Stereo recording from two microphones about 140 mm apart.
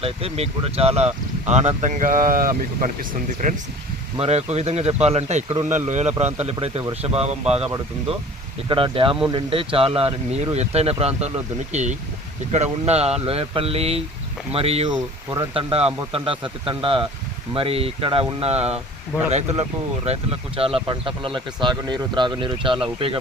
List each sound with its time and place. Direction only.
0.0 s speech: 45° right (ahead or behind); by 3.5 s 75° right (ahead or behind)
4.2 s speech: 50° right (ahead or behind)
8.7 s speech: 40° right (ahead or behind)